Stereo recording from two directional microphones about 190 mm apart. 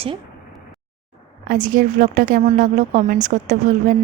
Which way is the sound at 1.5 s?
45° right (ahead or behind).